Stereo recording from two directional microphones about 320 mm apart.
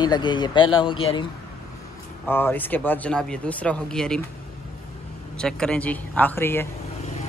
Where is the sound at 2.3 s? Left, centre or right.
Centre.